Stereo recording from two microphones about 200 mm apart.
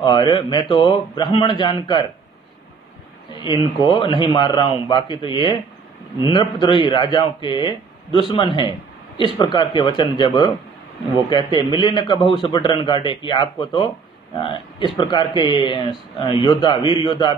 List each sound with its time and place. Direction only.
0.0 s speech: 25° left (ahead or behind)
3.4 s speech: 20° left (ahead or behind)
11.7 s speech: 20° left (ahead or behind)